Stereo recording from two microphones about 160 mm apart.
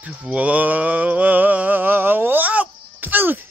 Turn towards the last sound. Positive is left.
turn(degrees=-10)  # may be behind; listen again after turning